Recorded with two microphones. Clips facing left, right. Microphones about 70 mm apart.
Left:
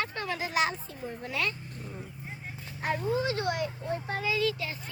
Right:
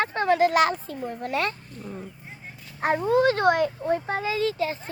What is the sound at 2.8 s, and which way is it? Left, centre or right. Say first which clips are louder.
Speech: right 9 dB; right.